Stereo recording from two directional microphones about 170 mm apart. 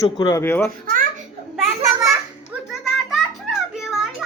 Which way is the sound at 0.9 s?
55° right (ahead or behind).